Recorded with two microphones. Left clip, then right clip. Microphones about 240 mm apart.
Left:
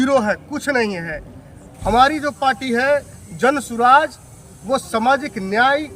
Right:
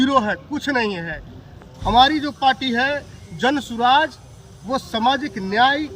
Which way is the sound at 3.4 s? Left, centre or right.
Centre.